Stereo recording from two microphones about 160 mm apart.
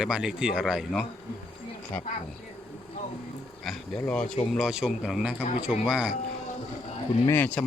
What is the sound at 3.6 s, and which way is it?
Speech, 5° left (ahead or behind).